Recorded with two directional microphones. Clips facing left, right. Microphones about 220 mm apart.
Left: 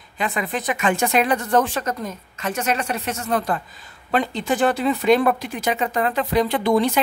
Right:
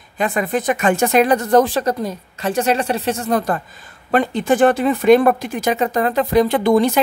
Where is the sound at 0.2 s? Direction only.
45° right (ahead or behind).